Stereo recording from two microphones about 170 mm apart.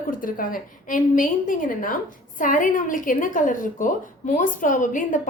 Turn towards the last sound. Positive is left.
turn(degrees=50)  # may be behind; listen again after turning